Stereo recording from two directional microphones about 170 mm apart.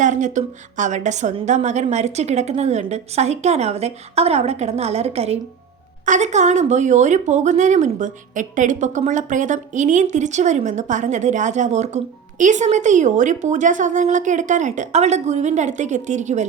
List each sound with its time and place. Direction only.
0.0 s a woman's voice: 45° right (ahead or behind)